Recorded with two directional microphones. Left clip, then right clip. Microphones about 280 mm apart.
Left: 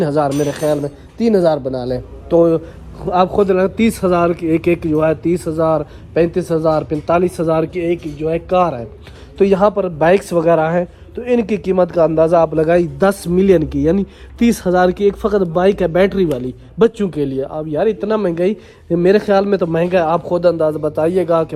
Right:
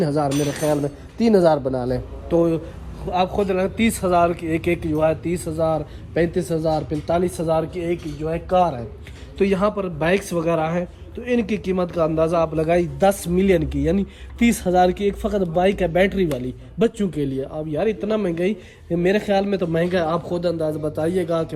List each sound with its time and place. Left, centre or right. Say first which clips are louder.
0.0 s a man's voice: left 5 dB; centre
1.9 s a man's voice: left 6 dB; centre
7.9 s speech: left 6 dB; centre
8.2 s a man's voice: left 4 dB; left
9.4 s a man's voice: left 7 dB; centre
20.5 s speech: left 6 dB; centre
21.1 s a man's voice: left 7 dB; centre